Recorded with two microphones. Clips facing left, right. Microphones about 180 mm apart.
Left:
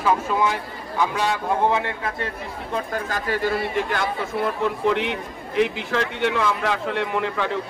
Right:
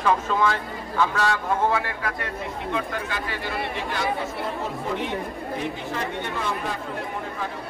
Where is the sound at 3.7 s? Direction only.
55° left (ahead or behind).